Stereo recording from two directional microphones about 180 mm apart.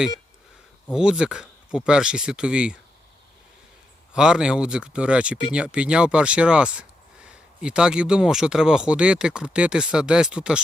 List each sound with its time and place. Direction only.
0.9 s speech: 5° right (ahead or behind)
4.1 s speech: 5° right (ahead or behind)